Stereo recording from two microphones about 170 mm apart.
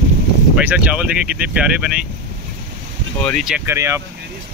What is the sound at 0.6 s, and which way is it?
Speech, 10° right (ahead or behind).